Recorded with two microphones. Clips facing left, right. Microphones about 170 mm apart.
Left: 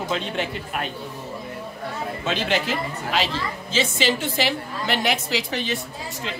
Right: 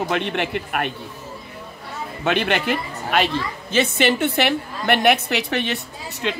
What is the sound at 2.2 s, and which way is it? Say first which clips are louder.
A woman's voice: right 4 dB; 65° right (ahead or behind).